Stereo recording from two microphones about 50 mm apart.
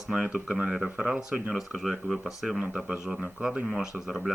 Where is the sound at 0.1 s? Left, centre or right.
Centre.